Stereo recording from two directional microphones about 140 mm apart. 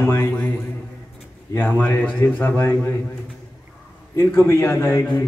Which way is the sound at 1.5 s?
15° left (ahead or behind).